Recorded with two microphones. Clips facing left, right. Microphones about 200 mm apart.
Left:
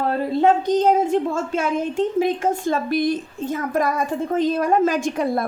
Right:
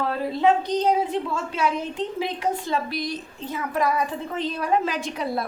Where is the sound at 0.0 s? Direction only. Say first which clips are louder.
Left 3 dB; 45° left (ahead or behind).